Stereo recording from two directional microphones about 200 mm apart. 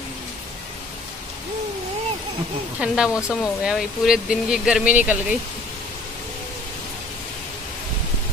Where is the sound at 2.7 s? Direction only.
5° right (ahead or behind).